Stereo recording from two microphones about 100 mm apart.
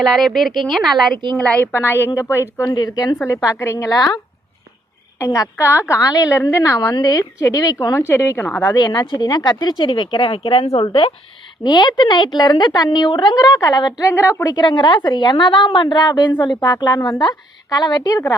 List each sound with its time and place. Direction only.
0.0 s speech: centre (ahead or behind)
1.4 s a woman's voice: 15° left (ahead or behind)
1.7 s a woman's voice: 25° left (ahead or behind)
2.7 s a woman's voice: 40° left (ahead or behind)
3.4 s a woman's voice: 30° left (ahead or behind)
5.2 s a woman's voice: 30° left (ahead or behind)
6.0 s a woman's voice: 35° left (ahead or behind)
7.9 s a woman's voice: 25° left (ahead or behind)
8.7 s a woman's voice: 45° left (ahead or behind); by 10.8 s 70° left (ahead or behind)
10.8 s speech: 60° left (ahead or behind)
11.6 s a woman's voice: 45° left (ahead or behind)
14.0 s a woman's voice: 30° left (ahead or behind)
14.4 s a woman's voice: 45° left (ahead or behind)